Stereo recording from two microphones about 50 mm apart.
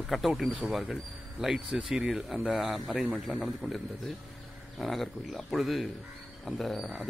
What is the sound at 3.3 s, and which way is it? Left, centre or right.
Speech, centre.